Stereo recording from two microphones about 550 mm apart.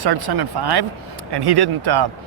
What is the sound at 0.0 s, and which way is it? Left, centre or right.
Speech, right.